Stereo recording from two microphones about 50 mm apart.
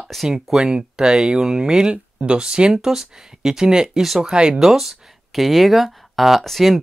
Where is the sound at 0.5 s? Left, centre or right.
Centre.